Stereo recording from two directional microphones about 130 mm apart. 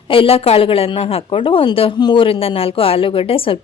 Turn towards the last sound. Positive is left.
turn(degrees=45)  # may be behind; listen again after turning